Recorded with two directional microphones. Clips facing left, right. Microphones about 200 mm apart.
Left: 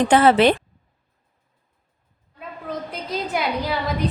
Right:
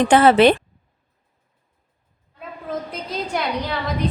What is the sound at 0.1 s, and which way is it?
Speech, 65° right (ahead or behind).